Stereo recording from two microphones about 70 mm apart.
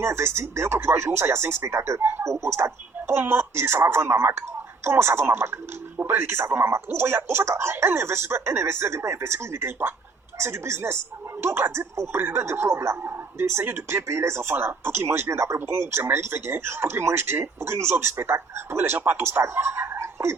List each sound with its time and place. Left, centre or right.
0.0 s speech: right